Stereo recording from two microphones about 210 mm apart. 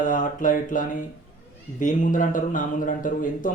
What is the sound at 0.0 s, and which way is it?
A man's voice, 40° left (ahead or behind).